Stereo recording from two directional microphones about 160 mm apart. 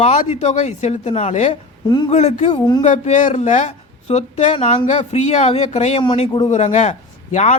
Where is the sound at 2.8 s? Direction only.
50° left (ahead or behind).